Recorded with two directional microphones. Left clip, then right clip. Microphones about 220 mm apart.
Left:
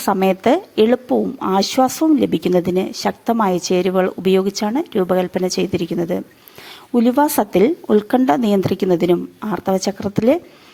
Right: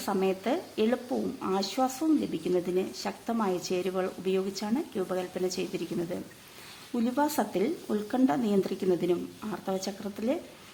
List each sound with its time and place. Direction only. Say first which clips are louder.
0.0 s a woman's voice: left 13 dB; 40° left (ahead or behind)